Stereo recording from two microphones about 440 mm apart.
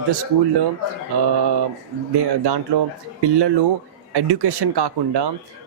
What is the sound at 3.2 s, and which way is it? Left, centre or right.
A man's voice, right.